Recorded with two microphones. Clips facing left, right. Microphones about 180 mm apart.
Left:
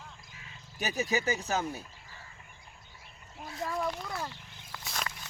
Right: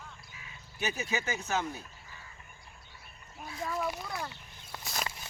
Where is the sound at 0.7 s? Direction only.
35° left (ahead or behind).